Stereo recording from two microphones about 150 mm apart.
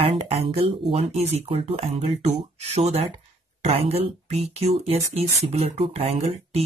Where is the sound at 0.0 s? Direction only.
40° right (ahead or behind).